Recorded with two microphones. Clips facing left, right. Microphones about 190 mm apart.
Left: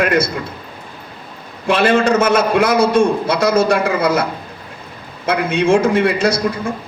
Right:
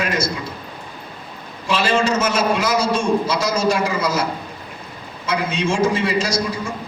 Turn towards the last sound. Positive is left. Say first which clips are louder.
# left 5 dB
turn(degrees=60)  # may be behind; listen again after turning